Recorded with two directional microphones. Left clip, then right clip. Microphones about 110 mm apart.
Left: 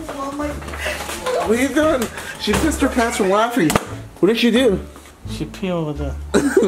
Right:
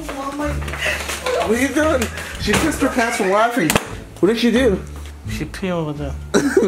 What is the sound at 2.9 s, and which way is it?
Speech, 15° left (ahead or behind).